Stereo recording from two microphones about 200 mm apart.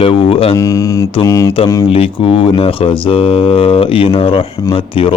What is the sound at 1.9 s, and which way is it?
Speech, 25° left (ahead or behind).